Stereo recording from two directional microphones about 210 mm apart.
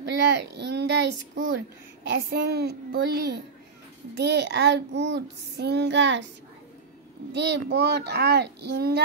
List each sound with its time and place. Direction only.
0.0 s child singing: 55° right (ahead or behind)
2.0 s a child's voice: 50° right (ahead or behind)
7.3 s a child's voice: 55° right (ahead or behind)